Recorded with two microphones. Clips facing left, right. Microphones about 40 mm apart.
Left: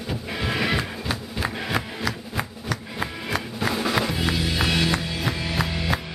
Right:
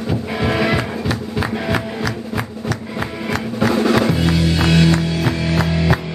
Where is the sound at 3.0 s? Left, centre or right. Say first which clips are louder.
Right 5 dB; centre.